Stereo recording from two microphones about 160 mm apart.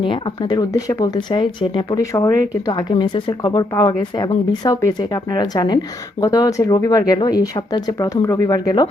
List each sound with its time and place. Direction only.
0.0 s speech: 30° left (ahead or behind)